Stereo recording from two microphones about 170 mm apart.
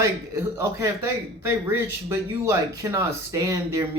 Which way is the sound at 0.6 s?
15° right (ahead or behind).